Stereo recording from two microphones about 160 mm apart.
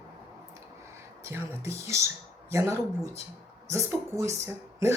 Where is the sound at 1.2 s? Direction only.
15° right (ahead or behind).